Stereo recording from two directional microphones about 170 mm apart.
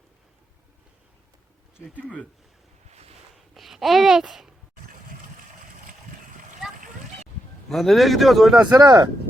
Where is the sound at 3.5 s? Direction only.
Centre (ahead or behind).